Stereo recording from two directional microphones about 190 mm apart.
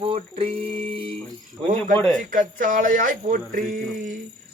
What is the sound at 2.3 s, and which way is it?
Speech, 45° right (ahead or behind).